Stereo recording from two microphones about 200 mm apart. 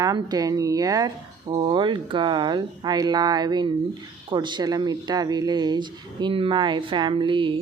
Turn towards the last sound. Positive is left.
turn(degrees=-25)  # may be behind; listen again after turning